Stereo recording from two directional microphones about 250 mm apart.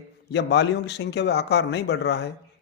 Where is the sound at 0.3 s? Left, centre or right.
Left.